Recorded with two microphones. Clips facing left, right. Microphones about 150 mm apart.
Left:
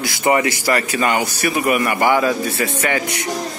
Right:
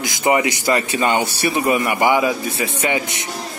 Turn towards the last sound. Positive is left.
turn(degrees=-20)  # may be behind; listen again after turning